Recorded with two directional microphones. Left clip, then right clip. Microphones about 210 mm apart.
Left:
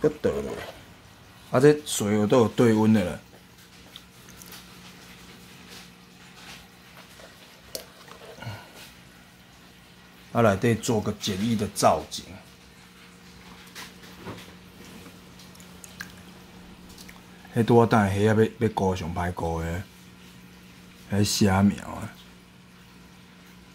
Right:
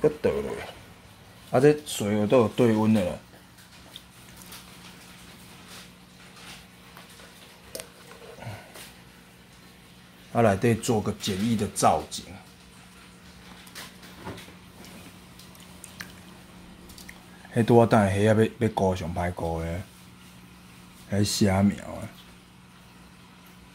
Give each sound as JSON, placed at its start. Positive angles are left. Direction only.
{"t": 0.0, "sound": "speech", "side_deg": 10}
{"t": 10.3, "sound": "speech", "side_deg": 5}
{"t": 17.6, "sound": "speech", "side_deg": 0}
{"t": 21.1, "sound": "speech", "side_deg": 10}